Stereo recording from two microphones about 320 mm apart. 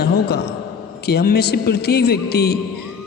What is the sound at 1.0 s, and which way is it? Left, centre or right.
A man's voice, left.